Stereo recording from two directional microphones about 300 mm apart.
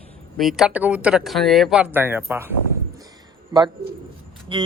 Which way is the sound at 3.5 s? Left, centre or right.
Centre.